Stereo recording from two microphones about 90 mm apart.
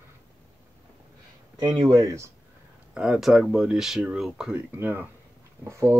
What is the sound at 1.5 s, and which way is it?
Speech, 50° right (ahead or behind).